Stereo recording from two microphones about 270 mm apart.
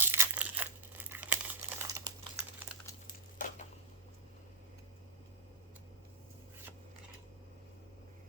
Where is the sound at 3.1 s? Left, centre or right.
Left.